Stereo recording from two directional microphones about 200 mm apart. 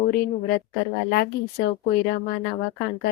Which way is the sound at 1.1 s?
50° left (ahead or behind).